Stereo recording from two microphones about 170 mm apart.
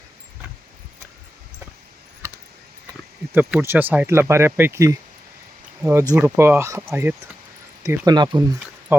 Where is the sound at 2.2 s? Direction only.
15° right (ahead or behind).